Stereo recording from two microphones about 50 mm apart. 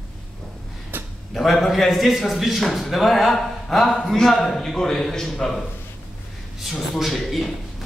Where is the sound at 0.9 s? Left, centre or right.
Right.